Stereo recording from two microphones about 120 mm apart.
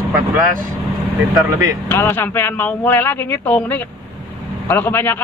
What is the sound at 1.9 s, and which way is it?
A man's voice, 20° left (ahead or behind).